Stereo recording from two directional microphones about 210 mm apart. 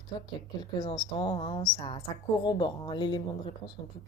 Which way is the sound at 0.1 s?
20° left (ahead or behind).